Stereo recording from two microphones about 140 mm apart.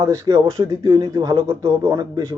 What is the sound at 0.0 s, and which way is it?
Speech, 20° right (ahead or behind).